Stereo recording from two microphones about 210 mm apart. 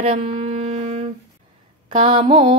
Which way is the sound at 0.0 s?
30° right (ahead or behind).